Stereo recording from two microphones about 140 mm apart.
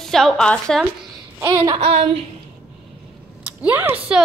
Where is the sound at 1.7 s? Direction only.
45° right (ahead or behind).